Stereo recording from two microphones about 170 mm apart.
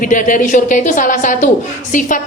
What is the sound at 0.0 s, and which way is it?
A woman's voice, 50° left (ahead or behind).